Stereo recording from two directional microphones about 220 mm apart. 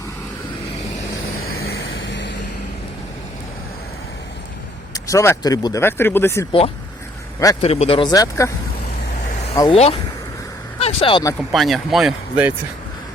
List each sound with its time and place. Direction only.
1.5 s vehicle: 45° left (ahead or behind)
1.8 s vehicle: 60° left (ahead or behind)
4.9 s speech: 15° left (ahead or behind)
7.6 s speech: 25° left (ahead or behind)
9.7 s speech: 30° left (ahead or behind)
11.3 s speech: centre (ahead or behind)